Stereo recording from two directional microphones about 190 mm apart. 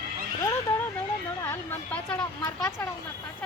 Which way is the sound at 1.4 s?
10° left (ahead or behind).